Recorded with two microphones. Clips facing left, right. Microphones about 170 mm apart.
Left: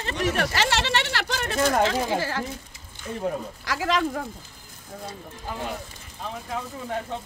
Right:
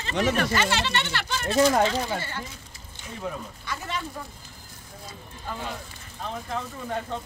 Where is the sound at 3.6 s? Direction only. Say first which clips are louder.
Left 10 dB; 90° left.